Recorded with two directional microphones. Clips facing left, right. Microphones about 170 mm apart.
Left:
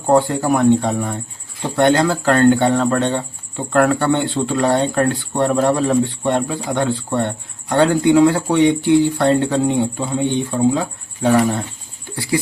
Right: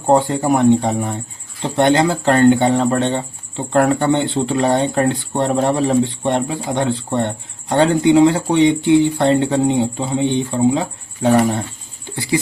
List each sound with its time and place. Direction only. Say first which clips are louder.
0.1 s speech: even; 20° right (ahead or behind)